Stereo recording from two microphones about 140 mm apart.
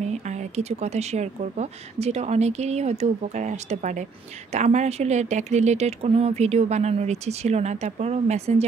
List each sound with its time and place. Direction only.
0.0 s speech: 55° right (ahead or behind)